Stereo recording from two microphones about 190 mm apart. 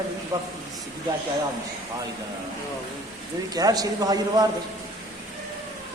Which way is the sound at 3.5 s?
20° right (ahead or behind).